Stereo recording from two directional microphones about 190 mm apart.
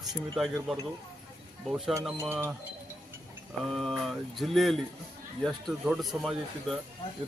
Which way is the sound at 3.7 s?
Centre (ahead or behind).